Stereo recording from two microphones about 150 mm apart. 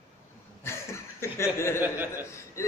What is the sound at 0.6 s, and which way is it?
A man's voice, 15° left (ahead or behind).